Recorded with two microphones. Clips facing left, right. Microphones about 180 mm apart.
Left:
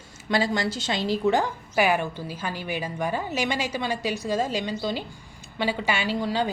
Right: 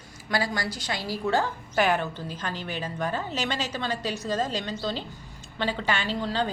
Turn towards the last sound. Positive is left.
turn(degrees=10)  # may be behind; listen again after turning